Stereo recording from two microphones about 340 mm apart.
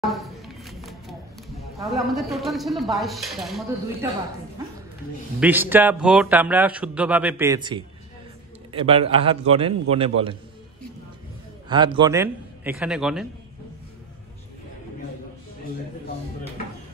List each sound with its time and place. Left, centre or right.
0.0 s a sound: centre
1.8 s speech: centre
5.4 s a man's voice: centre
11.7 s speech: centre